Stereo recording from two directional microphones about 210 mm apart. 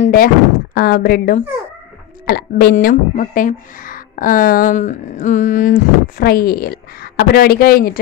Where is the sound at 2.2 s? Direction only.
45° left (ahead or behind).